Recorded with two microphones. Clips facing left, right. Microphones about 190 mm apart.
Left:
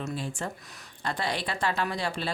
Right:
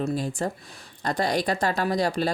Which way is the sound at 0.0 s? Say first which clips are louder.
Right 7 dB; 40° right (ahead or behind).